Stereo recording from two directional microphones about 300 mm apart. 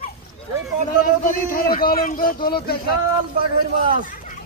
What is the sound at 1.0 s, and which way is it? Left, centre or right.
Speech, left.